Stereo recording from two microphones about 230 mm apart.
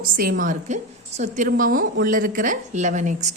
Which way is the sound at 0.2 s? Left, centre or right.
Right.